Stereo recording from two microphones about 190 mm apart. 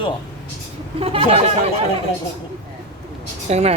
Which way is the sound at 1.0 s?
30° right (ahead or behind).